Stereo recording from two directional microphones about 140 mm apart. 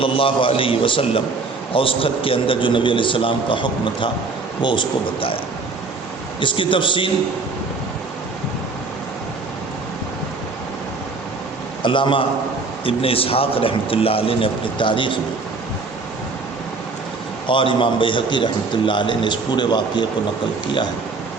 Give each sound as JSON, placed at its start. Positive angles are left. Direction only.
{"t": 0.0, "sound": "a man's voice", "side_deg": 40}
{"t": 6.4, "sound": "a man's voice", "side_deg": 35}
{"t": 11.8, "sound": "a man's voice", "side_deg": 35}
{"t": 17.4, "sound": "a man's voice", "side_deg": 35}